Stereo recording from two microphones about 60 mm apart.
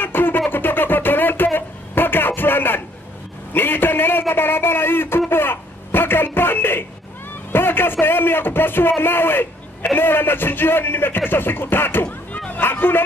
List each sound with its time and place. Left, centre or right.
0.0 s music: left
0.5 s a sound: left
7.5 s a man's voice: left